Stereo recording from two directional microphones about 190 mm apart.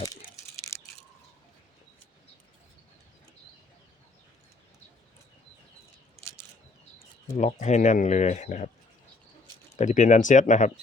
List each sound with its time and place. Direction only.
0.7 s a sound: 15° left (ahead or behind)
7.3 s speech: 40° left (ahead or behind)
9.7 s speech: 40° left (ahead or behind)